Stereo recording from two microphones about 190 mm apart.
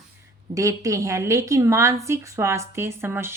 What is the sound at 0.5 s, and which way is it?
Speech, 15° right (ahead or behind).